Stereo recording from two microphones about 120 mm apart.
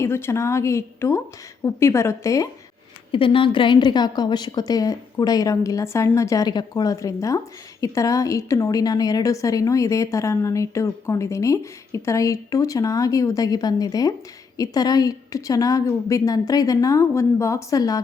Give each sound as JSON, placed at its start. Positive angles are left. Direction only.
{"t": 0.0, "sound": "a woman's voice", "side_deg": 20}
{"t": 3.1, "sound": "a woman's voice", "side_deg": 45}